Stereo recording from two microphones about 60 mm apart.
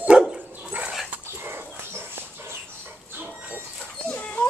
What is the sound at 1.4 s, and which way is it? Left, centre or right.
Dog, right.